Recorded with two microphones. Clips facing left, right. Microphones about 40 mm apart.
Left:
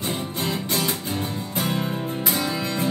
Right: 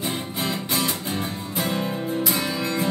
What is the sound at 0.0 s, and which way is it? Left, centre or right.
Music, centre.